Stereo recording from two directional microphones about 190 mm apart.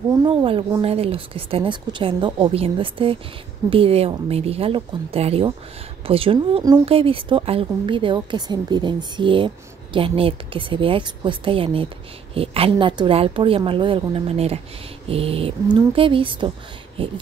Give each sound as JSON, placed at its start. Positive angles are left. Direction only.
{"t": 0.1, "sound": "speech", "side_deg": -20}